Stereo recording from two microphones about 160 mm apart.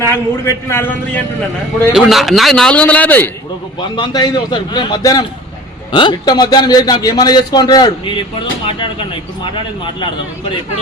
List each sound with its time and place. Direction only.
0.0 s a man's voice: 15° left (ahead or behind)
1.9 s a man's voice: centre (ahead or behind)
3.9 s a man's voice: 25° left (ahead or behind)